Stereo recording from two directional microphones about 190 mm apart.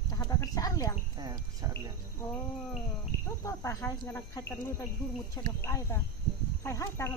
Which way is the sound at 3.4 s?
15° left (ahead or behind).